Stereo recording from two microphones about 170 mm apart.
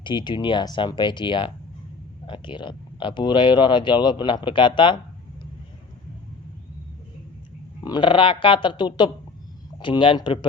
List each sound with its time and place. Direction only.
0.0 s speech: 30° left (ahead or behind)
7.9 s speech: 30° left (ahead or behind)